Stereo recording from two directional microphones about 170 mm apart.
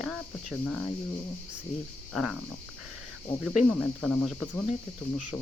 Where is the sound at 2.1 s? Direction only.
Centre (ahead or behind).